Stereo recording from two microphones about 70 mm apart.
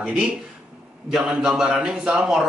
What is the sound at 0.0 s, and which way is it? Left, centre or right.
Speech, centre.